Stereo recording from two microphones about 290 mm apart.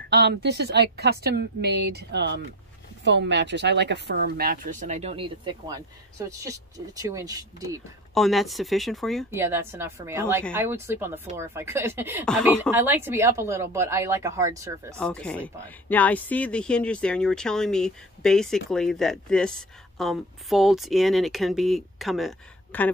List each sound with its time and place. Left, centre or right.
0.1 s speech: right; by 7.8 s centre
8.1 s a woman's voice: centre
15.0 s a woman's voice: centre